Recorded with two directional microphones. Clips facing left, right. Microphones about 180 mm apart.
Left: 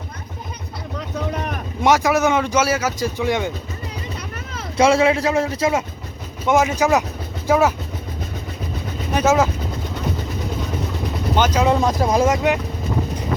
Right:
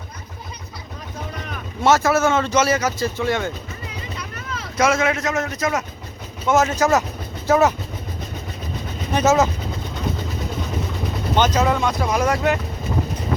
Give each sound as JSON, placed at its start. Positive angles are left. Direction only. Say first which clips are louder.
{"t": 0.9, "sound": "vehicle", "louder": "left 8 dB", "side_deg": 65}
{"t": 1.8, "sound": "speech", "louder": "even", "side_deg": 15}
{"t": 4.8, "sound": "a man's voice", "louder": "left 4 dB", "side_deg": 30}
{"t": 6.5, "sound": "speech", "louder": "left 1 dB", "side_deg": 10}
{"t": 9.1, "sound": "speech", "louder": "even", "side_deg": 10}
{"t": 11.3, "sound": "speech", "louder": "even", "side_deg": 10}
{"t": 11.7, "sound": "speech", "louder": "left 3 dB", "side_deg": 35}
{"t": 12.2, "sound": "speech", "louder": "left 1 dB", "side_deg": 20}